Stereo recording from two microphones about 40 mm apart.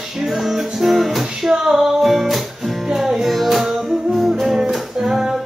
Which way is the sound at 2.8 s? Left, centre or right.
Centre.